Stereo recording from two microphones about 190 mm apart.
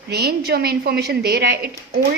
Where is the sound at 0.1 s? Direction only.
60° right (ahead or behind).